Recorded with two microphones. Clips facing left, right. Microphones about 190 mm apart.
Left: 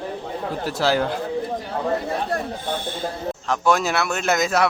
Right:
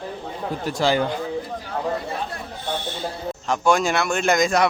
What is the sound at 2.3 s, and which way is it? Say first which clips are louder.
Snake: left 4 dB; 50° left (ahead or behind).